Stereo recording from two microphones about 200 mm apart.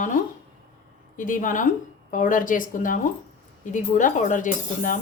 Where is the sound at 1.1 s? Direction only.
40° left (ahead or behind).